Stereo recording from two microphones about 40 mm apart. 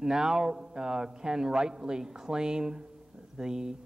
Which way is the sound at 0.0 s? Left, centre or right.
Centre.